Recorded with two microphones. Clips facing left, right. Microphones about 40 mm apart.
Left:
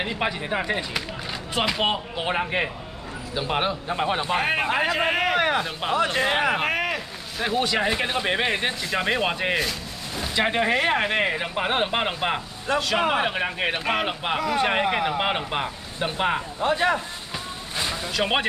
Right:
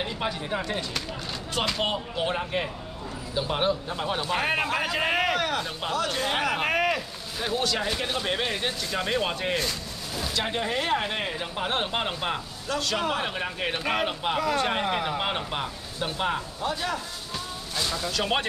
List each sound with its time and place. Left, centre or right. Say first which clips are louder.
0.0 s speech: left 4 dB; left
2.3 s speech: left 4 dB; left
3.3 s speech: left 1 dB; centre
4.4 s speech: left 2 dB; centre
5.3 s speech: left 5 dB; left
6.6 s boat: even; centre
7.4 s speech: left 4 dB; centre
14.7 s speech: left 4 dB; left
17.7 s speech: left 2 dB; left